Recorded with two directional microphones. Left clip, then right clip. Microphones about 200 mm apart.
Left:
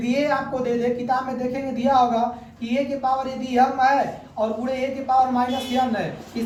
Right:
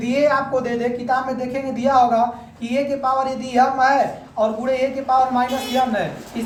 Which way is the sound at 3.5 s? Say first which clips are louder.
Right 2 dB; 15° right (ahead or behind).